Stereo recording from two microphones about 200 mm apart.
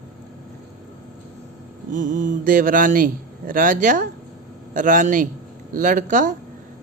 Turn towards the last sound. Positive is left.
turn(degrees=-40)  # may be behind; listen again after turning